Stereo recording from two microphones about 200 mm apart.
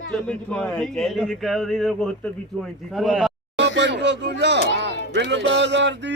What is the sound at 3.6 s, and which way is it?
Speech, 60° right (ahead or behind).